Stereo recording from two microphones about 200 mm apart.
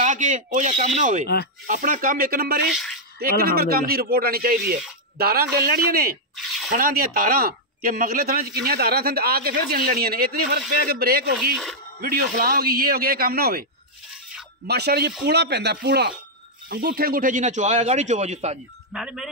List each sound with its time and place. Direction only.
0.0 s speech: 40° right (ahead or behind)
2.6 s speech: centre (ahead or behind)
3.2 s speech: 50° right (ahead or behind)
6.3 s a sound: centre (ahead or behind)
6.7 s speech: 45° right (ahead or behind)
14.7 s speech: 55° right (ahead or behind); by 18.6 s 35° right (ahead or behind)
18.9 s speech: 5° right (ahead or behind)